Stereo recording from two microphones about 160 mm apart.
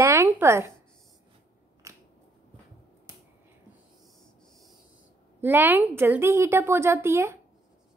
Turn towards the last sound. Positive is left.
turn(degrees=-15)  # may be behind; listen again after turning